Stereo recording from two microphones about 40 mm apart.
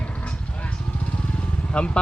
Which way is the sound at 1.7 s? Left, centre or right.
Left.